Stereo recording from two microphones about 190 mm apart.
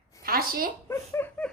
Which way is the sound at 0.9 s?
10° left (ahead or behind).